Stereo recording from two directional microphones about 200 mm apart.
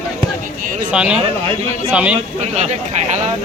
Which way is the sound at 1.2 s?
25° right (ahead or behind).